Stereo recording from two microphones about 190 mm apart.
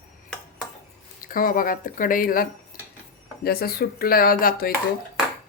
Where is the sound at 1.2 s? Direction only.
50° left (ahead or behind).